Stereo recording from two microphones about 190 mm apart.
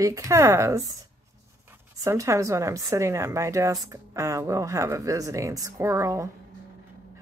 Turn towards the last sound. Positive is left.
turn(degrees=-15)  # may be behind; listen again after turning